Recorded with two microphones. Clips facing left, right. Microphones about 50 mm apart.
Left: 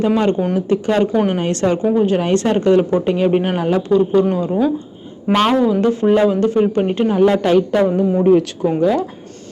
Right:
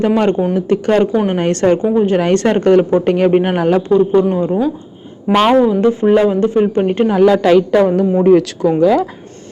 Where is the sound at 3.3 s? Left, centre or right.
Right.